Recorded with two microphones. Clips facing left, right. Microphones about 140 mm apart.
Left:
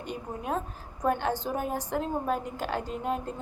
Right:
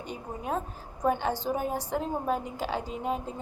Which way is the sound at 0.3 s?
Centre (ahead or behind).